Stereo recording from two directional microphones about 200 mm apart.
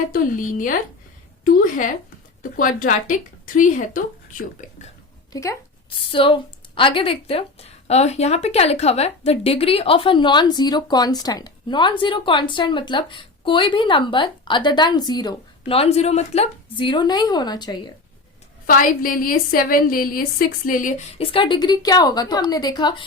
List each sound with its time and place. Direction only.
0.1 s speech: 40° left (ahead or behind)
2.4 s speech: 40° left (ahead or behind)
5.3 s speech: 15° left (ahead or behind)
18.6 s a woman's voice: 45° left (ahead or behind)
21.2 s speech: 25° left (ahead or behind)